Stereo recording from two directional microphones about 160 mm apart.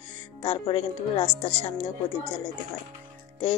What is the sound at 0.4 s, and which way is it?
Music, 35° left (ahead or behind).